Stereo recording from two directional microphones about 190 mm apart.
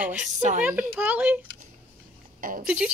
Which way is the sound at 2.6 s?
5° right (ahead or behind).